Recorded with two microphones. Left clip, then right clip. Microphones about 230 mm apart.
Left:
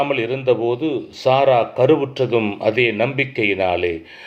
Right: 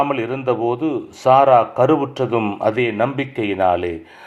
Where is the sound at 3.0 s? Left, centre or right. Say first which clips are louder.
Left 1 dB; right.